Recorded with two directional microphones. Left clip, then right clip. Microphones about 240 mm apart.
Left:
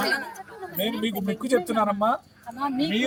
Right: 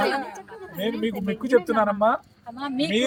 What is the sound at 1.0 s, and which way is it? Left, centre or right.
Speech, centre.